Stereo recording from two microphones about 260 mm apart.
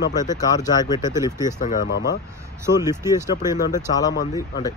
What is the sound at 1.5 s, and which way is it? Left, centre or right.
Speech, left.